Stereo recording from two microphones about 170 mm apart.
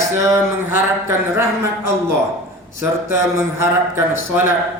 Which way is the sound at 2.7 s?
15° right (ahead or behind).